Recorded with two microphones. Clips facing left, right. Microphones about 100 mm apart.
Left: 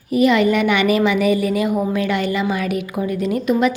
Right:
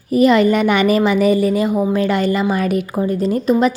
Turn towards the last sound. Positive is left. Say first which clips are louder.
# right 2 dB
turn(degrees=-35)  # may be behind; listen again after turning